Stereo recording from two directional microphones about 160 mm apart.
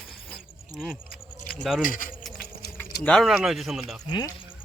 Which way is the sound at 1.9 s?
60° left (ahead or behind).